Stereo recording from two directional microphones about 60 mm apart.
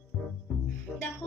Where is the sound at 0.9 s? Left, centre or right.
Centre.